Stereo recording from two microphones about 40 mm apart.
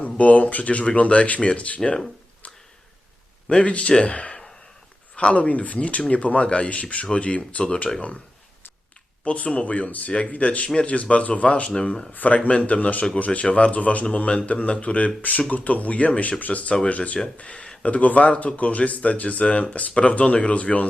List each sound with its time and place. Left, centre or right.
0.0 s speech: left
3.6 s speech: left
7.9 s speech: centre
9.2 s speech: left
12.4 s speech: left